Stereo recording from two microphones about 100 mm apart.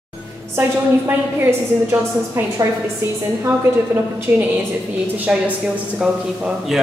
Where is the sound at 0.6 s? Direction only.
20° right (ahead or behind).